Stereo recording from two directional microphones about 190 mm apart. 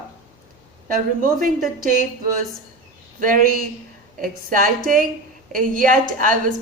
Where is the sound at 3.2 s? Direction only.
45° right (ahead or behind).